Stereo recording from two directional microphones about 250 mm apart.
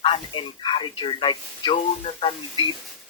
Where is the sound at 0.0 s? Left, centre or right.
Left.